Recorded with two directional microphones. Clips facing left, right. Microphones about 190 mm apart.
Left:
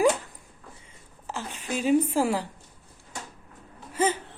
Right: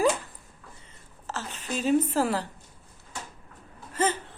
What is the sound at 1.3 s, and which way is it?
Speech, 15° left (ahead or behind).